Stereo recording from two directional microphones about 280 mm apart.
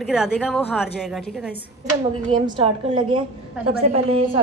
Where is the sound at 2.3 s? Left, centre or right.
Centre.